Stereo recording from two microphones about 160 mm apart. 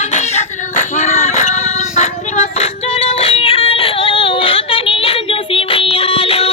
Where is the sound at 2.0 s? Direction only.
45° left (ahead or behind).